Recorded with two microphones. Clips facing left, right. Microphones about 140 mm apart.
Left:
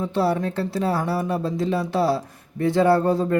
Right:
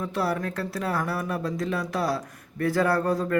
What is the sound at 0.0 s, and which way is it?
Speech, 30° left (ahead or behind).